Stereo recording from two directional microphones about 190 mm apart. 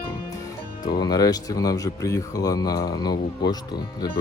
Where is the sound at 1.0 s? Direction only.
20° left (ahead or behind).